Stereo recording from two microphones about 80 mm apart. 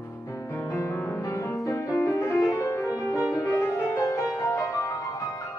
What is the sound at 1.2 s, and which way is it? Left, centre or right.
Music, left.